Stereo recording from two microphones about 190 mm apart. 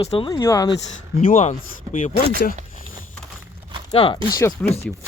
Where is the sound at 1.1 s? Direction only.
45° left (ahead or behind).